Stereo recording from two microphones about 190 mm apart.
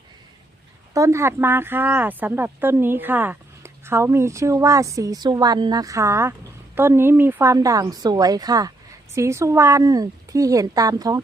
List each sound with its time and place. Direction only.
0.9 s speech: 15° right (ahead or behind)